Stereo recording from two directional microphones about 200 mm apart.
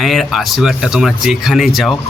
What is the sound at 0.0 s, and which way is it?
Speech, centre (ahead or behind).